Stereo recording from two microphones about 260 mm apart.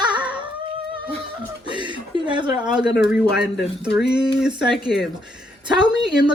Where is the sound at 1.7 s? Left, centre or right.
Centre.